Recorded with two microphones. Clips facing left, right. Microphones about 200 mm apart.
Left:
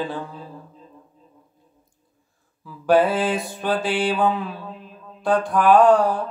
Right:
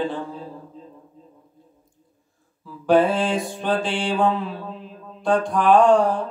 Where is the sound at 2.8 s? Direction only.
5° left (ahead or behind).